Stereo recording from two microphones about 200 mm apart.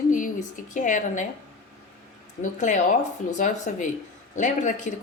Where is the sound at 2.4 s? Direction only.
35° left (ahead or behind).